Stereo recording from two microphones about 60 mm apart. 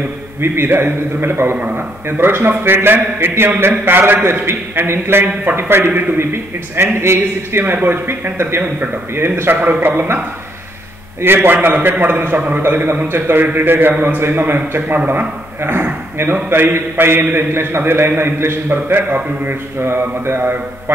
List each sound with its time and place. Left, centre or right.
0.4 s a man's voice: right
11.1 s a man's voice: right